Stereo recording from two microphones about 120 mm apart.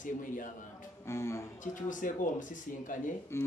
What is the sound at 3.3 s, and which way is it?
Speech, 20° left (ahead or behind).